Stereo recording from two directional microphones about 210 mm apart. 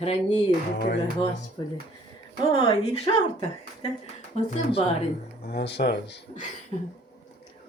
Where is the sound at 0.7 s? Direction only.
55° left (ahead or behind).